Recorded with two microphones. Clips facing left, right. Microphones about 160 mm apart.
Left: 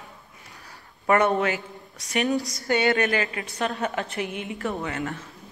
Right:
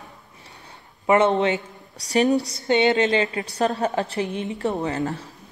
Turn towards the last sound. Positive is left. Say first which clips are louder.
# right 5 dB
turn(degrees=-35)  # may be behind; listen again after turning